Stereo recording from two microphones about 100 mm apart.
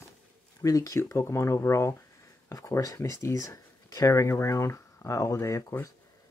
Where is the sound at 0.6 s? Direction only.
35° left (ahead or behind).